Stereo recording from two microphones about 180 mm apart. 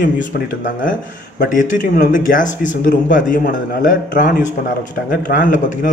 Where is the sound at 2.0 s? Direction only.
45° left (ahead or behind).